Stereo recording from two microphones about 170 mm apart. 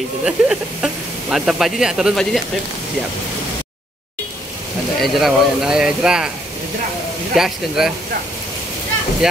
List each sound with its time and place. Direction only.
0.2 s speech: 5° right (ahead or behind)
5.0 s speech: centre (ahead or behind)
7.3 s speech: centre (ahead or behind)
9.2 s speech: 5° right (ahead or behind)